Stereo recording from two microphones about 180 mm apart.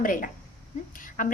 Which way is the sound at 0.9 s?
50° left (ahead or behind).